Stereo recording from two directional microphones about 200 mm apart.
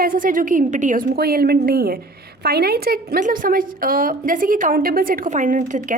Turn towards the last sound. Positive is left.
turn(degrees=-40)  # may be behind; listen again after turning